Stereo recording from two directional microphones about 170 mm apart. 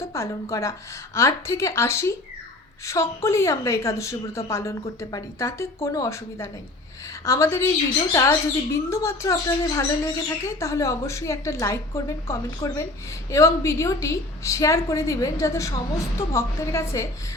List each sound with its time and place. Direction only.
0.0 s speech: 15° left (ahead or behind)